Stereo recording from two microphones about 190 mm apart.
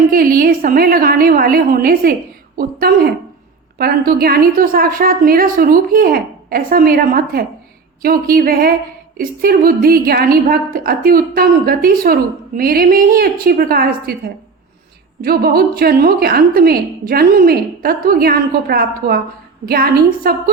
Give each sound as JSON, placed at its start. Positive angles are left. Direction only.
{"t": 0.1, "sound": "a woman's voice", "side_deg": -50}
{"t": 15.2, "sound": "a woman's voice", "side_deg": -50}